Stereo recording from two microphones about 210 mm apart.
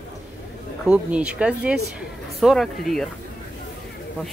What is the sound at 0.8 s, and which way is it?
Speech, 5° right (ahead or behind).